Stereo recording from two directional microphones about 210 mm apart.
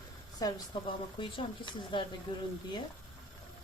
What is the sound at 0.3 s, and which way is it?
Speech, 20° left (ahead or behind).